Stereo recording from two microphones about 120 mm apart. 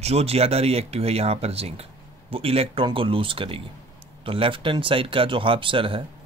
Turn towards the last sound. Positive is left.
turn(degrees=-45)  # may be behind; listen again after turning